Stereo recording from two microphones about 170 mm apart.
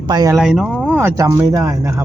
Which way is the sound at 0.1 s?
20° right (ahead or behind).